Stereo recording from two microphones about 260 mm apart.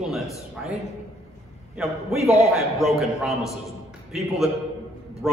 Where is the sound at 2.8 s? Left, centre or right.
Centre.